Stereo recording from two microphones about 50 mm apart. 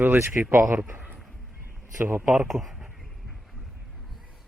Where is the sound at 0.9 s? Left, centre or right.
Right.